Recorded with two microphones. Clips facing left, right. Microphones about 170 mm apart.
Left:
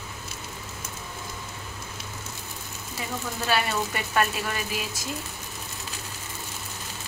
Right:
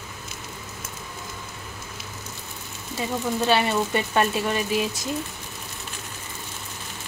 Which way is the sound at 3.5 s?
25° right (ahead or behind).